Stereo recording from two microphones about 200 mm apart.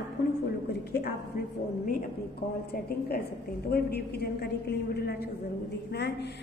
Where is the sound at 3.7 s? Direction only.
55° left (ahead or behind).